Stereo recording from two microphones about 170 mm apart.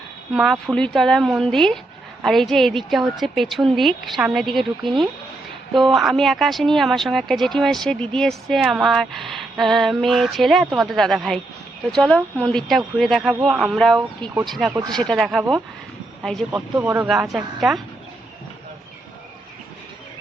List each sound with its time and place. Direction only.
0.3 s speech: centre (ahead or behind)
14.7 s speech: 20° right (ahead or behind)
14.9 s speech: 5° left (ahead or behind)
16.6 s speech: 15° right (ahead or behind)
17.1 s speech: 5° right (ahead or behind)